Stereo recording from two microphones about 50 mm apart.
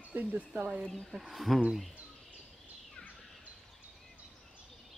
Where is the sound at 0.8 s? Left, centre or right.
Centre.